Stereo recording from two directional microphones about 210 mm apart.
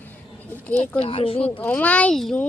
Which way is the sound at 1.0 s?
25° left (ahead or behind).